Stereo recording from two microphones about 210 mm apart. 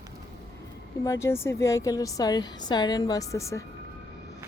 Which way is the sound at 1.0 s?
15° left (ahead or behind).